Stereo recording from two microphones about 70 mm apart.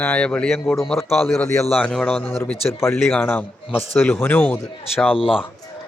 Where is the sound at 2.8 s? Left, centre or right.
Left.